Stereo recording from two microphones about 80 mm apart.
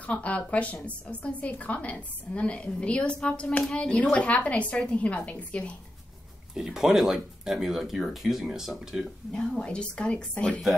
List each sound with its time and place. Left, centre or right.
0.0 s a woman's voice: centre
6.5 s speech: centre
9.3 s a woman's voice: centre